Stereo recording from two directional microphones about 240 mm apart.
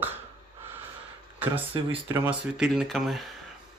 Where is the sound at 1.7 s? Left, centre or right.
Right.